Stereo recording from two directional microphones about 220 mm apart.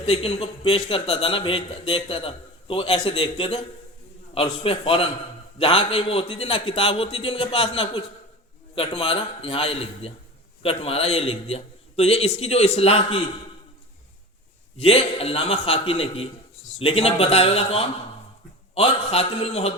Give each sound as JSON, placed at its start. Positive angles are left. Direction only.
{"t": 0.0, "sound": "a man's voice", "side_deg": 25}
{"t": 14.8, "sound": "a man's voice", "side_deg": 25}